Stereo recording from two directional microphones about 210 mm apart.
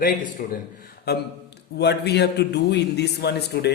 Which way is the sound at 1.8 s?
50° left (ahead or behind).